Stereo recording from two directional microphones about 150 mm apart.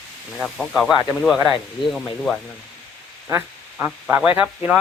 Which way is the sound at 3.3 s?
15° right (ahead or behind).